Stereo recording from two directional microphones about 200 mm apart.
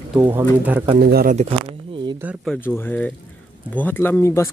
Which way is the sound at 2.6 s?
10° left (ahead or behind).